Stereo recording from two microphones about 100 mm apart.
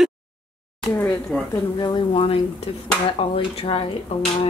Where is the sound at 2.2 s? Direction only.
75° left (ahead or behind).